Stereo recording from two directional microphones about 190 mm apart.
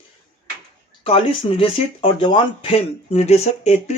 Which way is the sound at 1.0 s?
30° left (ahead or behind).